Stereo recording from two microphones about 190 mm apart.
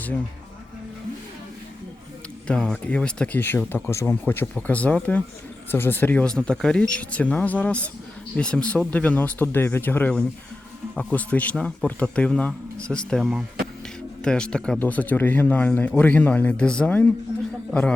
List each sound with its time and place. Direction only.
2.5 s speech: 5° left (ahead or behind)